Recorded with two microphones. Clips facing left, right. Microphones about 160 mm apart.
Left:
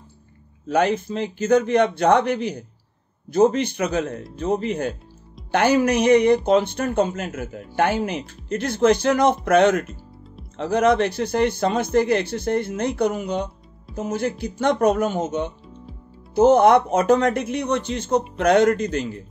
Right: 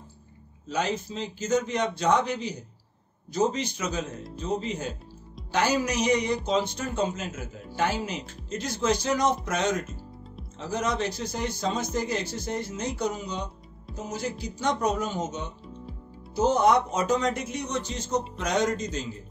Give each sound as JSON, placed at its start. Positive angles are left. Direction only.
{"t": 0.7, "sound": "speech", "side_deg": 60}